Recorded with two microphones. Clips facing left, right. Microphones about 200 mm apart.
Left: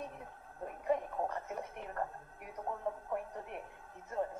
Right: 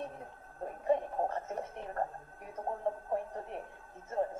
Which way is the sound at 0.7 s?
30° right (ahead or behind).